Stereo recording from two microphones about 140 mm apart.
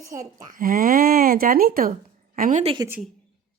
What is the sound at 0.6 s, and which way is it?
Speech, 85° right.